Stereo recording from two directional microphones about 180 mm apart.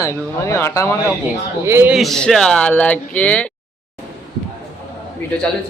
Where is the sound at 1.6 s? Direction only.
15° right (ahead or behind).